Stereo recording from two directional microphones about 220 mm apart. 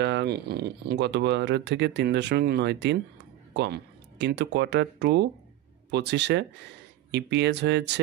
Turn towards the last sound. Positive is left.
turn(degrees=-50)  # may be behind; listen again after turning